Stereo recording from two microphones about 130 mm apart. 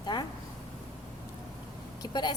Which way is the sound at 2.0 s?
35° left (ahead or behind).